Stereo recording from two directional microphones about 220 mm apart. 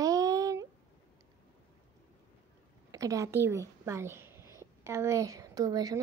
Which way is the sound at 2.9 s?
15° right (ahead or behind).